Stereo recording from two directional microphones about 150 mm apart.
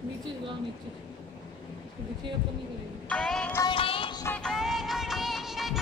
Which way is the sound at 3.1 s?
5° left (ahead or behind).